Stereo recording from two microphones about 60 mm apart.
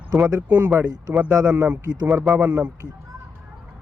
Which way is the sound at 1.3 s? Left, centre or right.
Right.